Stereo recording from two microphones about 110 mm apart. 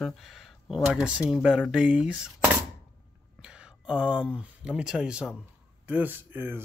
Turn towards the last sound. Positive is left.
turn(degrees=-20)  # may be behind; listen again after turning